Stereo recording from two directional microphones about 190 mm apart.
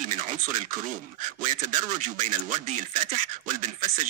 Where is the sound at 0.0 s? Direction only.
45° right (ahead or behind).